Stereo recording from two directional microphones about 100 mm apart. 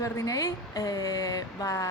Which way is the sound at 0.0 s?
35° left (ahead or behind).